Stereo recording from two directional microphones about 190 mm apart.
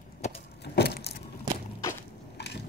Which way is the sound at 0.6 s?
60° left (ahead or behind).